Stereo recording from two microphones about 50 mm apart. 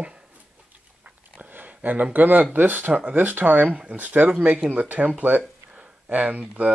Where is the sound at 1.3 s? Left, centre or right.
Right.